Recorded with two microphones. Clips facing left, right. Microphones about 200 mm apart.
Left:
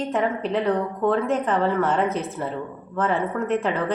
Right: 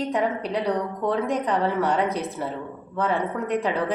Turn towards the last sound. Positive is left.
turn(degrees=0)  # may be behind; listen again after turning